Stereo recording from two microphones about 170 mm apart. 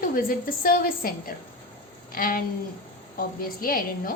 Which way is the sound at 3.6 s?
55° left (ahead or behind).